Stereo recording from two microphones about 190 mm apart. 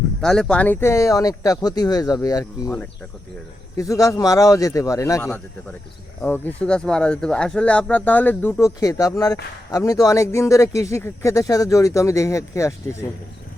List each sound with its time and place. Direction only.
0.2 s speech: 5° left (ahead or behind)